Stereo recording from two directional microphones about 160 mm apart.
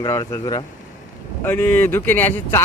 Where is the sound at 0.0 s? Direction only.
25° left (ahead or behind).